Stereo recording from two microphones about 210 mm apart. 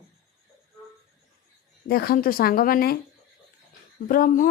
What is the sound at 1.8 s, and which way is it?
Speech, 45° left (ahead or behind).